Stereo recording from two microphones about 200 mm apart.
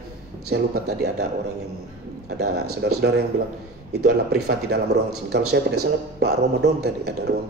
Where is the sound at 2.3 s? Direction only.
55° right (ahead or behind).